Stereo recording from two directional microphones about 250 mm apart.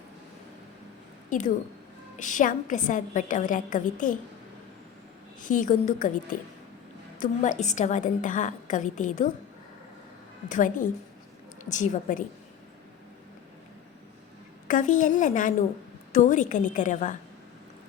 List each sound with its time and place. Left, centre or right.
1.3 s a woman's voice: left
5.4 s a woman's voice: left
10.5 s a woman's voice: left
14.7 s a woman's voice: left